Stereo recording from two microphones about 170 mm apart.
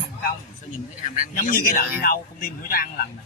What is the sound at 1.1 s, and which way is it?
A man's voice, 55° left (ahead or behind).